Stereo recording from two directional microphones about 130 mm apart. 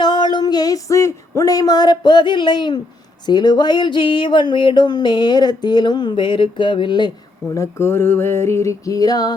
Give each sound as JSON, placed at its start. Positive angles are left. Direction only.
{"t": 0.0, "sound": "female singing", "side_deg": 35}
{"t": 1.4, "sound": "a sound", "side_deg": 30}
{"t": 7.5, "sound": "music", "side_deg": 20}